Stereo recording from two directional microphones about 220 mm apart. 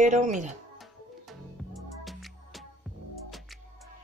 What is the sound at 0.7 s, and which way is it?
Music, centre (ahead or behind).